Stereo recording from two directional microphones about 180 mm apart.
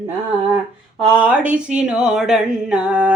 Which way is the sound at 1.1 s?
5° right (ahead or behind).